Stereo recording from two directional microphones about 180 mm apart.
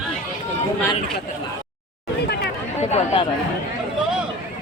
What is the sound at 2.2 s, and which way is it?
Chatter, 65° left (ahead or behind).